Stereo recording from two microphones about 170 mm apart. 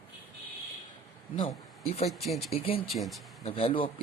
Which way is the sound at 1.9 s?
40° left (ahead or behind).